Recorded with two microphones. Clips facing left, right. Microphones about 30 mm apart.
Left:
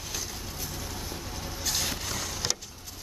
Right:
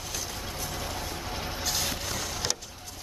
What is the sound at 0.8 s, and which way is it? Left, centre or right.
Mechanisms, right.